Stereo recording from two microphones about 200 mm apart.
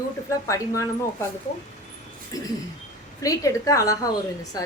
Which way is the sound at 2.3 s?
20° left (ahead or behind).